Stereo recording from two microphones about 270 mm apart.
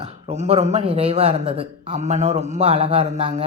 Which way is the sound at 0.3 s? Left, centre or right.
Right.